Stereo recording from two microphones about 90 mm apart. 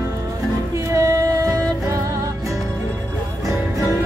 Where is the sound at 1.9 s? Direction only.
35° right (ahead or behind).